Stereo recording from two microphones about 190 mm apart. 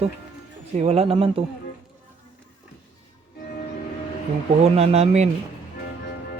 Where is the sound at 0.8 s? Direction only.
35° right (ahead or behind).